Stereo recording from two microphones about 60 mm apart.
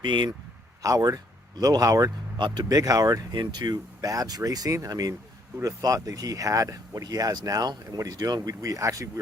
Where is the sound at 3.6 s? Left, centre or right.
Right.